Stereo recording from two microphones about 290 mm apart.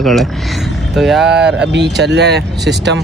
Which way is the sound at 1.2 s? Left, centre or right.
Right.